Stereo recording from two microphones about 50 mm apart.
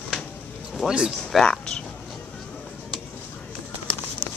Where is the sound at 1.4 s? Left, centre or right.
Centre.